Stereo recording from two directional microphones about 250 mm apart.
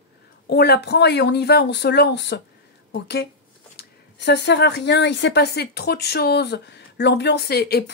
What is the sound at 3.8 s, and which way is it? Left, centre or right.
Speech, left.